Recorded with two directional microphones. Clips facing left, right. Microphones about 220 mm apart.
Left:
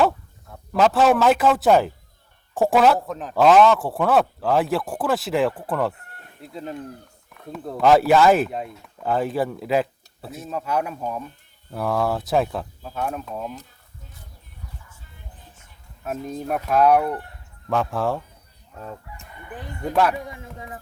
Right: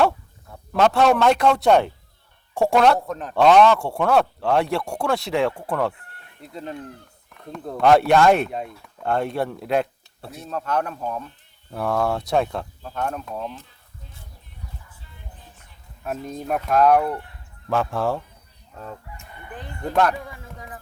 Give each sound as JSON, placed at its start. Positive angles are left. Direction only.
{"t": 0.0, "sound": "a man's voice", "side_deg": 0}
{"t": 16.2, "sound": "speech", "side_deg": 0}
{"t": 19.5, "sound": "speech", "side_deg": 10}
{"t": 20.2, "sound": "speech", "side_deg": 20}